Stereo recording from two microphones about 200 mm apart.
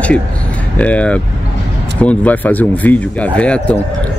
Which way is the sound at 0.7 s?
5° left (ahead or behind).